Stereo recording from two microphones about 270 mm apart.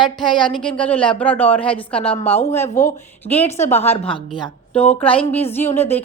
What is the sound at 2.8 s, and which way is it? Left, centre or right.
A woman's voice, left.